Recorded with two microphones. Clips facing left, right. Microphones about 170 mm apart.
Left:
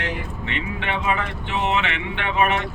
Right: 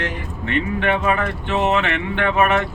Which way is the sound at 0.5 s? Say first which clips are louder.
Right 8 dB; 50° right (ahead or behind).